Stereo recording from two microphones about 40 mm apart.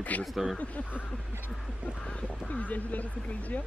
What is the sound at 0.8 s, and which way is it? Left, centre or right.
Speech, left.